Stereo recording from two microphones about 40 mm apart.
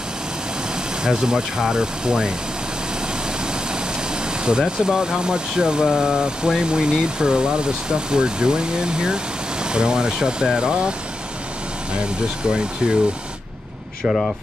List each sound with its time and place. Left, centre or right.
1.0 s speech: centre
3.7 s speech: right
12.8 s speech: right